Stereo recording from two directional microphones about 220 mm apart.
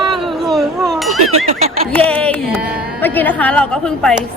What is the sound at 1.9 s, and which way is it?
Speech, 5° left (ahead or behind).